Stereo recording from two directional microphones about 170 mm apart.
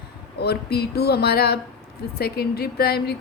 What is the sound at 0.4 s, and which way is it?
A woman's voice, 65° left (ahead or behind).